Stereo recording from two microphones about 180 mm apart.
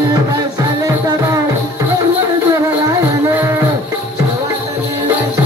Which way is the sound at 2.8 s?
15° right (ahead or behind).